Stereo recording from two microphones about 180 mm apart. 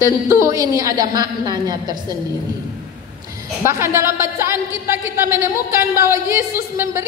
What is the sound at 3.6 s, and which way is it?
A woman's voice, 15° right (ahead or behind).